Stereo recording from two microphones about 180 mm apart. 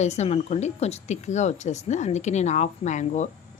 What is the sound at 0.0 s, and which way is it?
A woman's voice, 40° left (ahead or behind).